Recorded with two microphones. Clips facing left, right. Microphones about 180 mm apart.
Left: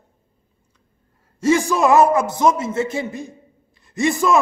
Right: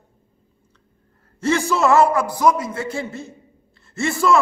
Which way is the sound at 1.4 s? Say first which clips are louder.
Left 2 dB; 15° left (ahead or behind).